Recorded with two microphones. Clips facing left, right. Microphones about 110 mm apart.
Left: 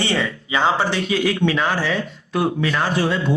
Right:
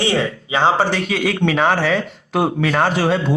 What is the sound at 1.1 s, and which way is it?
Speech, 65° right (ahead or behind).